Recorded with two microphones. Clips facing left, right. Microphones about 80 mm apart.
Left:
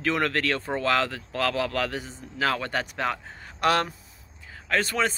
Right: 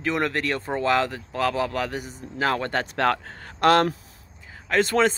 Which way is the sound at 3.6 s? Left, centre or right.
Right.